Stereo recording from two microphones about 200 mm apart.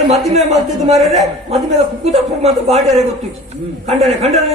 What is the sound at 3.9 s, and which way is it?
Speech, 30° right (ahead or behind).